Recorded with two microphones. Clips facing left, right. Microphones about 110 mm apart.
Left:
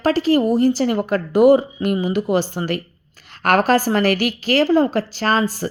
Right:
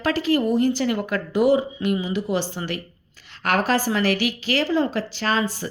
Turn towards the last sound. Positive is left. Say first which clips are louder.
# left 4 dB
turn(degrees=45)  # may be behind; listen again after turning